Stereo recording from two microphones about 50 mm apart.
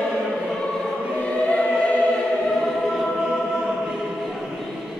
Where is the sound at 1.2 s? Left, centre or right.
Left.